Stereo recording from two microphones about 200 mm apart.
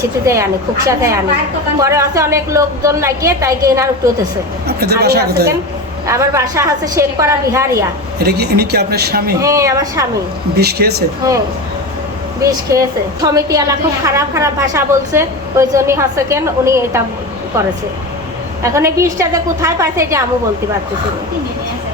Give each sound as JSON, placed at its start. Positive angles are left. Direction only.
{"t": 0.3, "sound": "a woman's voice", "side_deg": -15}
{"t": 4.8, "sound": "speech", "side_deg": -55}
{"t": 6.1, "sound": "a woman's voice", "side_deg": -15}
{"t": 8.2, "sound": "speech", "side_deg": -55}
{"t": 9.4, "sound": "a woman's voice", "side_deg": -15}
{"t": 10.6, "sound": "speech", "side_deg": -50}
{"t": 12.4, "sound": "a woman's voice", "side_deg": -15}
{"t": 18.6, "sound": "a woman's voice", "side_deg": -15}